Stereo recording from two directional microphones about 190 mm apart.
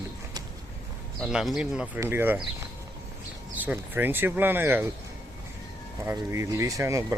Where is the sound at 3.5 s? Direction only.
10° right (ahead or behind).